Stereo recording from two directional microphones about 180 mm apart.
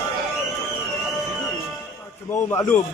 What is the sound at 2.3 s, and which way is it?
Speech, 15° left (ahead or behind).